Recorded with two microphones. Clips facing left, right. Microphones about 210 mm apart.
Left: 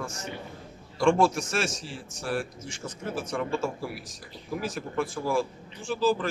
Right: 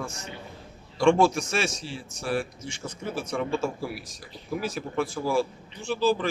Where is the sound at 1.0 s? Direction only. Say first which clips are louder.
Right 2 dB; centre (ahead or behind).